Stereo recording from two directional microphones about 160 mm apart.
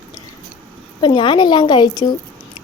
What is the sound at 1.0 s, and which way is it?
A woman's voice, 30° left (ahead or behind).